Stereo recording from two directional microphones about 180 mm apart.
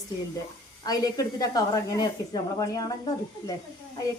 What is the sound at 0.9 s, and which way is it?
A woman's voice, 20° left (ahead or behind).